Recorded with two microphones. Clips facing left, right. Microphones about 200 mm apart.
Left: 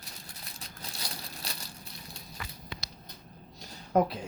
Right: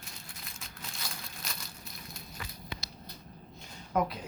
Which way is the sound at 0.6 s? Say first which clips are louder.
Left 2 dB; 35° left (ahead or behind).